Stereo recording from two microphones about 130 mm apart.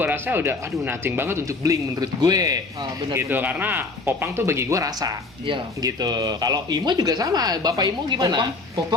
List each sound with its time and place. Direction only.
0.0 s speech: 15° right (ahead or behind)
3.1 s speech: 15° right (ahead or behind)